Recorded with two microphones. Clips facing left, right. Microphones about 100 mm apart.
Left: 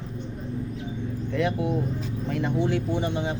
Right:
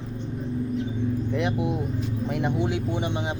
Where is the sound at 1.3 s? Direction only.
15° right (ahead or behind).